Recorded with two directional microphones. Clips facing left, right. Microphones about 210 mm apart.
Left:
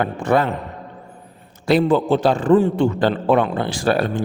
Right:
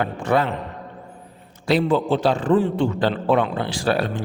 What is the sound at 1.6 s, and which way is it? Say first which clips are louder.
A man's voice: left 3 dB; 50° left (ahead or behind).